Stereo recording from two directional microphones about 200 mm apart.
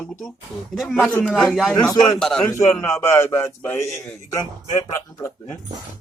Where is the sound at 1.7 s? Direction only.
15° left (ahead or behind).